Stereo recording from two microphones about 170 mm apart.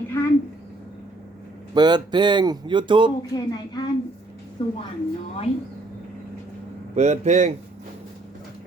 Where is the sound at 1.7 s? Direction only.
25° right (ahead or behind).